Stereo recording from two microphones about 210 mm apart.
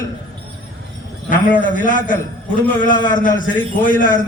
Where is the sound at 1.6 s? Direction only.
40° left (ahead or behind).